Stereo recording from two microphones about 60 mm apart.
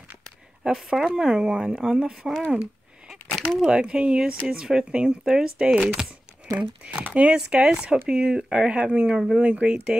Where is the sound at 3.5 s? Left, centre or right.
Centre.